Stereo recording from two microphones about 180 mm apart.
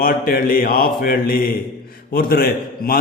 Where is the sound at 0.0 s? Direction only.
55° left (ahead or behind).